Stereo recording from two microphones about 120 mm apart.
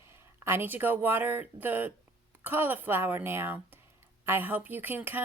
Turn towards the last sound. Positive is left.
turn(degrees=-15)  # may be behind; listen again after turning